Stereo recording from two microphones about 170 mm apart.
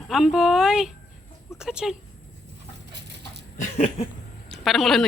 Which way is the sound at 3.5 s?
40° left (ahead or behind).